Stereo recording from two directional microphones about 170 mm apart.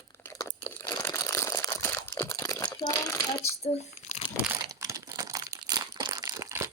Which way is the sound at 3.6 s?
40° left (ahead or behind).